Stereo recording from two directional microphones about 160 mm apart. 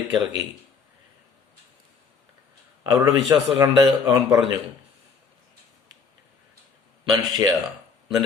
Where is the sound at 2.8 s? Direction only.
20° right (ahead or behind).